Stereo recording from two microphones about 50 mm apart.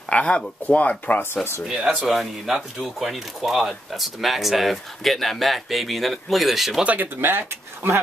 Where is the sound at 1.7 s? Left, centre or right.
Centre.